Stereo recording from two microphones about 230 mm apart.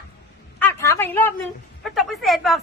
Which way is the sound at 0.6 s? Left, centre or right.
Centre.